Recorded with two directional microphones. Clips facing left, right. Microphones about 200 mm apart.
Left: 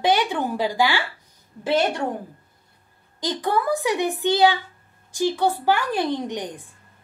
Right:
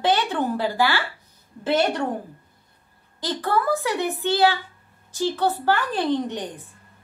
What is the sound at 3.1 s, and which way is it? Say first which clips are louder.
A woman's voice: left 1 dB; 15° left (ahead or behind).